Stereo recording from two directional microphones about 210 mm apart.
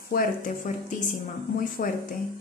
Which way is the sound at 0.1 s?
40° left (ahead or behind).